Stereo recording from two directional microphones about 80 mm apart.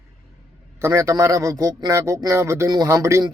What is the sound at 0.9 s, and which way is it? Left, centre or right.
Speech, right.